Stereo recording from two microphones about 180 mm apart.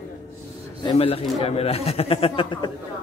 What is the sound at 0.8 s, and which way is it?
A man's voice, 30° left (ahead or behind).